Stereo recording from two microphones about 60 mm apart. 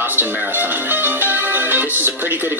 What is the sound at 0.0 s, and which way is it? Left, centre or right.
Speech, right.